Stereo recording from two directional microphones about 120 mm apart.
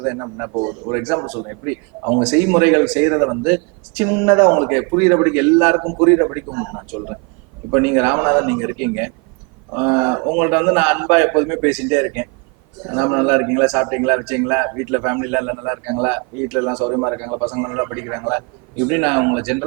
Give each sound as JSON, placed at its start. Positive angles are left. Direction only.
{"t": 0.0, "sound": "a man's voice", "side_deg": -20}